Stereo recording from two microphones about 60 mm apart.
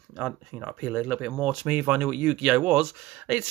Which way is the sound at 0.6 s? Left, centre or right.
Right.